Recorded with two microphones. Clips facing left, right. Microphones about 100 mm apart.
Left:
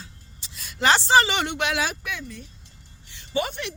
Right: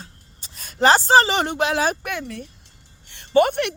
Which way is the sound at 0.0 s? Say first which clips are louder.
Right 2 dB; 45° right (ahead or behind).